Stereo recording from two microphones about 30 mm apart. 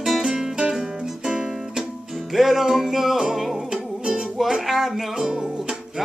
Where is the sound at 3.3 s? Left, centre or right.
Centre.